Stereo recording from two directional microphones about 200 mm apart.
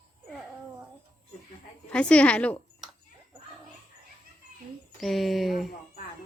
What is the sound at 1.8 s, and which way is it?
Speech, 5° left (ahead or behind).